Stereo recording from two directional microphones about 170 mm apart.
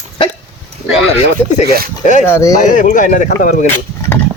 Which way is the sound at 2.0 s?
45° left (ahead or behind).